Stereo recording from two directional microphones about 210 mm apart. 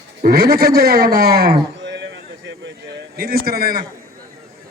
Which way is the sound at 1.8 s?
55° right (ahead or behind).